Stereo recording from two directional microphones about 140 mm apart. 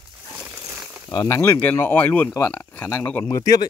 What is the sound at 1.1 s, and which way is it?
Speech, 30° left (ahead or behind).